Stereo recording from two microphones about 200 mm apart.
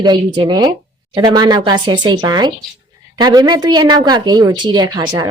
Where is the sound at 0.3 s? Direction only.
20° right (ahead or behind).